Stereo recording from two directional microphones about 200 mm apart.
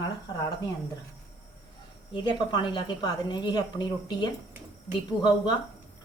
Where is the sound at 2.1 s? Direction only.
25° left (ahead or behind).